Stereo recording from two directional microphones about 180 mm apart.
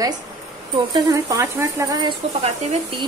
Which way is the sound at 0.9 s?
20° right (ahead or behind).